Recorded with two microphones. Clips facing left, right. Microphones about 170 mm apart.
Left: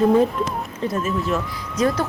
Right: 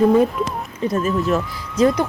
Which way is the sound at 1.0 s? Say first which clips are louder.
Right 4 dB; 35° right (ahead or behind).